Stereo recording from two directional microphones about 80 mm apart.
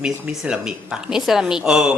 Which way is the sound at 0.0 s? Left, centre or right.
Centre.